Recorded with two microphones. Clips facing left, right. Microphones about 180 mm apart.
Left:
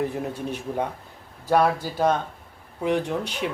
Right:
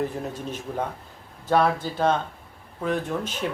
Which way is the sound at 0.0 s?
15° left (ahead or behind).